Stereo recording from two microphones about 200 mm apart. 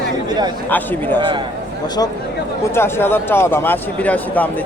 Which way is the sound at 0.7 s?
10° left (ahead or behind).